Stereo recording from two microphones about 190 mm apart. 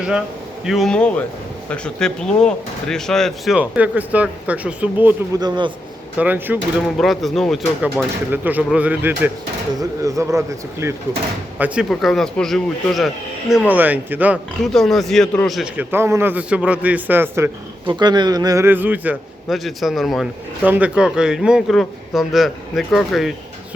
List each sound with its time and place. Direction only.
0.6 s speech: centre (ahead or behind)
5.4 s a man's voice: 25° right (ahead or behind)
6.1 s a man's voice: 10° right (ahead or behind)
14.6 s a man's voice: centre (ahead or behind)
17.8 s a man's voice: 25° right (ahead or behind); by 23.3 s centre (ahead or behind)